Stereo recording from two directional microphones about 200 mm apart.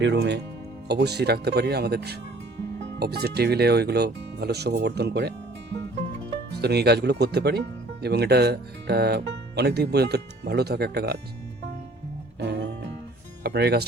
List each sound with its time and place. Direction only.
0.0 s speech: 60° right (ahead or behind)
6.6 s speech: 55° right (ahead or behind)
12.4 s music: 60° right (ahead or behind)
13.4 s speech: 55° right (ahead or behind)